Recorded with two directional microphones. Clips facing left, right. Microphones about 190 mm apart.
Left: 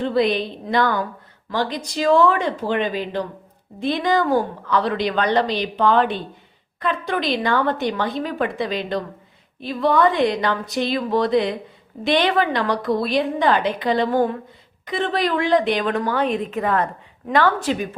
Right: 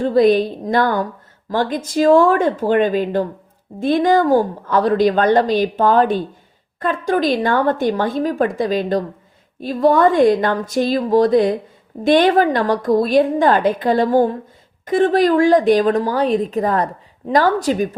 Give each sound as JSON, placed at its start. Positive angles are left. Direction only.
{"t": 0.0, "sound": "a woman's voice", "side_deg": -45}